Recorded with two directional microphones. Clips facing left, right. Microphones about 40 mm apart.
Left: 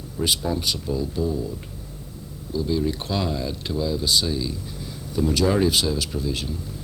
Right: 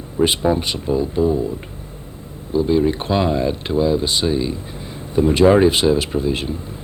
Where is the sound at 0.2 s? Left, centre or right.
Right.